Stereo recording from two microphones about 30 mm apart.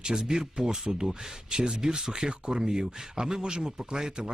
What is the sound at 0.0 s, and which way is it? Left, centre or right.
Speech, right.